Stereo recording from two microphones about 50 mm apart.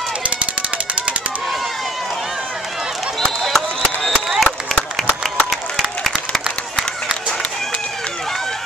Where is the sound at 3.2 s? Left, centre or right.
Centre.